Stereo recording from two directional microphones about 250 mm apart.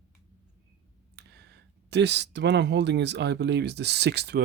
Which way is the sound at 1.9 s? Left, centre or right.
Right.